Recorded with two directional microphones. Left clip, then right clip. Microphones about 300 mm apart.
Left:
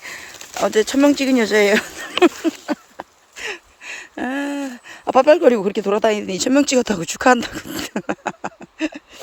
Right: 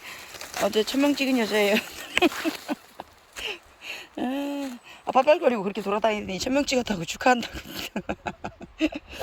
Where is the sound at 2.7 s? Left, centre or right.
Centre.